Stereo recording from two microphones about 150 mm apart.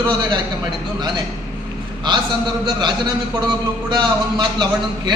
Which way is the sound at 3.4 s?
30° right (ahead or behind).